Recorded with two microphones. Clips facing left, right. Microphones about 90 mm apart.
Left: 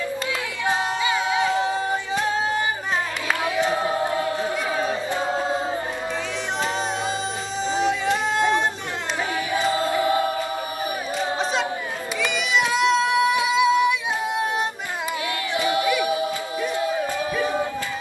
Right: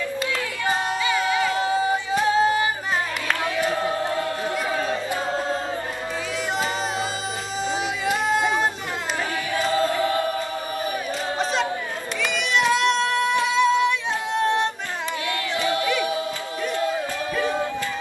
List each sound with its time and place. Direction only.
1.0 s crowd: 30° left (ahead or behind)
1.5 s singing: centre (ahead or behind)
3.7 s choir: 10° left (ahead or behind)
7.6 s music: 5° right (ahead or behind)
9.5 s choir: 20° left (ahead or behind)
12.2 s a sound: centre (ahead or behind)
14.3 s singing: 10° left (ahead or behind)
15.5 s choir: 15° left (ahead or behind)
16.7 s a sound: 10° left (ahead or behind)